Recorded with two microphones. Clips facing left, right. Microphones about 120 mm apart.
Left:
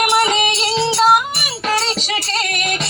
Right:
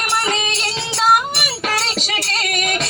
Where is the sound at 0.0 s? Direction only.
15° left (ahead or behind).